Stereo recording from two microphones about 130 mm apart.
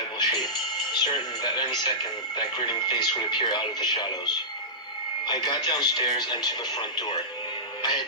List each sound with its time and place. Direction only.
0.2 s speech: 35° left (ahead or behind)
5.3 s speech: 35° left (ahead or behind)
7.8 s music: 35° left (ahead or behind)